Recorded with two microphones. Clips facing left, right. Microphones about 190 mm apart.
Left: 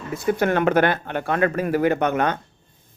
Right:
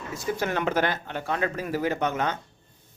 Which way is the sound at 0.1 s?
60° left (ahead or behind).